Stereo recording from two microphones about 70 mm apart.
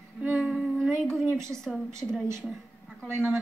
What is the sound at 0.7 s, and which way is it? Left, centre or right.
A woman's voice, centre.